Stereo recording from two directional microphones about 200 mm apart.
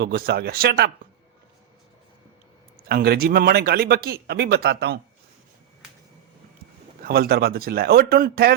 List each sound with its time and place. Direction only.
0.0 s speech: 50° right (ahead or behind)
2.9 s speech: 50° right (ahead or behind)
7.0 s speech: 50° right (ahead or behind)